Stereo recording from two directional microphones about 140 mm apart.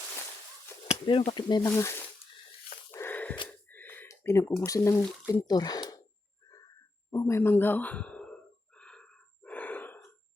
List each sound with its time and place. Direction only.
0.9 s chop: 40° left (ahead or behind)
1.3 s speech: 30° left (ahead or behind)
1.6 s speech: 20° left (ahead or behind)
2.9 s a sound: 15° left (ahead or behind)
3.7 s speech: 15° left (ahead or behind)
7.1 s a sound: 20° left (ahead or behind)